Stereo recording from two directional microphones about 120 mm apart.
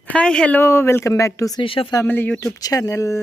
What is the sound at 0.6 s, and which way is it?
Speech, 20° left (ahead or behind).